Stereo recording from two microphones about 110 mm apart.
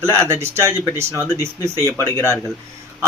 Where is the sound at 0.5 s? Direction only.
25° right (ahead or behind).